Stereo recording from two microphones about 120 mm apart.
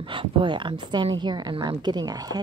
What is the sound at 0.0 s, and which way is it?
A woman's voice, 45° right (ahead or behind).